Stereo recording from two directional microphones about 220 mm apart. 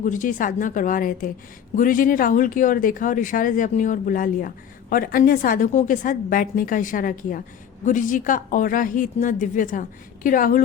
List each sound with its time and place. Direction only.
0.0 s speech: 35° left (ahead or behind)